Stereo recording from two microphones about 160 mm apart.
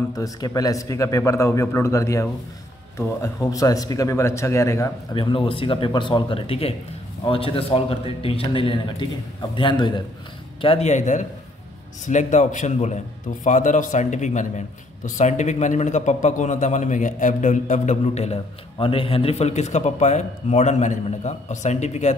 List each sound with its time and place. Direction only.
0.1 s a man's voice: 20° left (ahead or behind)
3.4 s a man's voice: 20° left (ahead or behind)
5.1 s a man's voice: 30° left (ahead or behind)